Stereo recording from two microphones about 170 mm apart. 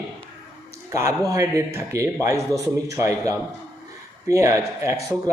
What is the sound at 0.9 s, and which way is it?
A man's voice, 20° right (ahead or behind).